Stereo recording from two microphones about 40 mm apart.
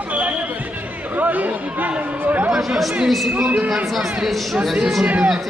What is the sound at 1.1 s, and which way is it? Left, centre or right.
Speech, right.